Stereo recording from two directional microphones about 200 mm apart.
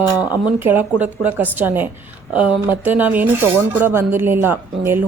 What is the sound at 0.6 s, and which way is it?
Speech, 10° right (ahead or behind).